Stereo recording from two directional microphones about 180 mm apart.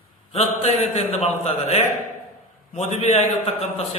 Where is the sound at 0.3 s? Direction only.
35° left (ahead or behind).